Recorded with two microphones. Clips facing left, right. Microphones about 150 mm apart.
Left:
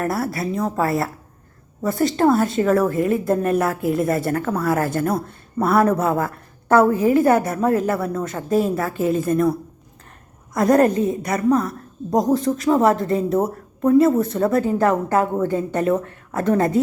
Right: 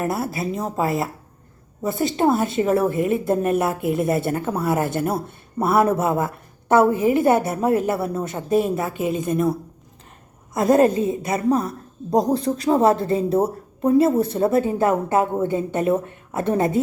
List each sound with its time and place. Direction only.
0.0 s a woman's voice: 20° right (ahead or behind)
10.5 s a woman's voice: 25° right (ahead or behind)